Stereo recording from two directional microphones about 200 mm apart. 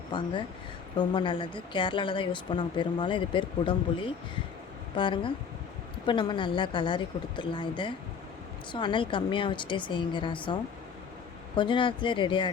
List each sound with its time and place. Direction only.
0.9 s speech: 25° left (ahead or behind)